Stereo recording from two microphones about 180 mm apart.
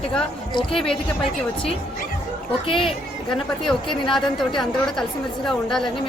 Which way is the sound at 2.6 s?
30° left (ahead or behind).